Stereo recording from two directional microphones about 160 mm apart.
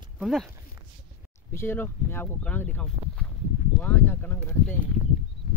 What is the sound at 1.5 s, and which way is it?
Speech, 15° left (ahead or behind).